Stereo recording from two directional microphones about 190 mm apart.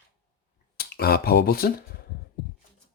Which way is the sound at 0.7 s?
55° left (ahead or behind).